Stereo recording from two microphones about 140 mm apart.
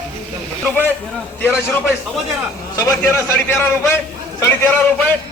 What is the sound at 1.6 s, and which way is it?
A man's voice, 15° left (ahead or behind).